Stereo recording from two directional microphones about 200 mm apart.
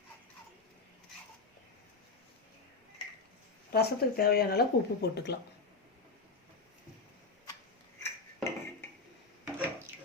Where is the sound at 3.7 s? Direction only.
50° left (ahead or behind).